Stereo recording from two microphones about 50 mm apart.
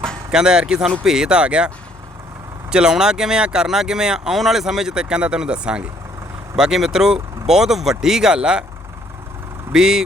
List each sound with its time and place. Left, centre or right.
0.3 s speech: centre
9.7 s speech: centre